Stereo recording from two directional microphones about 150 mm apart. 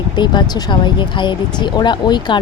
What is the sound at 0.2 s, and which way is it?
Speech, 30° left (ahead or behind).